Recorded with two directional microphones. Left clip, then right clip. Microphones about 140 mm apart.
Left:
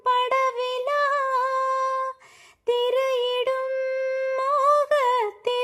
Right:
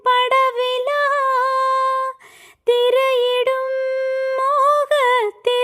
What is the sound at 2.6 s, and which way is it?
Female singing, 40° right (ahead or behind).